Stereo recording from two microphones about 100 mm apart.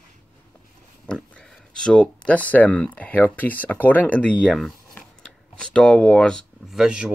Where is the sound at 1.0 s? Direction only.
10° left (ahead or behind).